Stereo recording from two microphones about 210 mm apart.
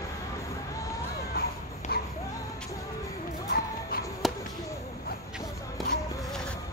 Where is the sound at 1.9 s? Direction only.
45° left (ahead or behind).